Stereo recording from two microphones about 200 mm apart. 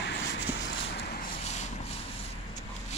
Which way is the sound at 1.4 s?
35° left (ahead or behind).